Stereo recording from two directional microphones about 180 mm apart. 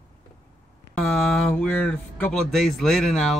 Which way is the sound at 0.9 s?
Centre (ahead or behind).